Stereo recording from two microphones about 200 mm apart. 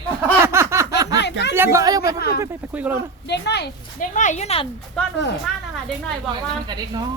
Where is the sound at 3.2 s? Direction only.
55° left (ahead or behind).